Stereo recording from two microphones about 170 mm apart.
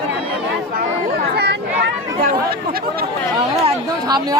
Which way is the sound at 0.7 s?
65° right (ahead or behind).